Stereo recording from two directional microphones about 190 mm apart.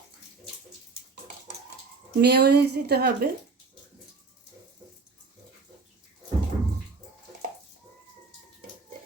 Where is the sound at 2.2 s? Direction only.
60° right (ahead or behind).